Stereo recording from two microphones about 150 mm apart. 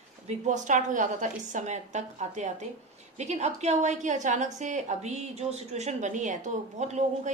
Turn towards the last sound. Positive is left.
turn(degrees=-50)  # may be behind; listen again after turning